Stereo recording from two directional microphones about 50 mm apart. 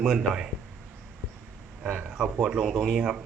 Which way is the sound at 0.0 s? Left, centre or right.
Centre.